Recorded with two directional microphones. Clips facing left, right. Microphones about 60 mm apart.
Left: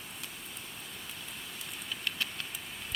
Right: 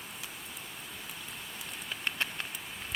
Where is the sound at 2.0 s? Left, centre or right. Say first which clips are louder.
Right 3 dB; right.